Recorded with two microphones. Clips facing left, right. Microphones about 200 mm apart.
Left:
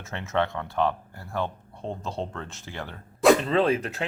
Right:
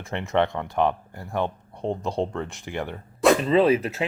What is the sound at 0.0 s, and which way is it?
Speech, 15° right (ahead or behind).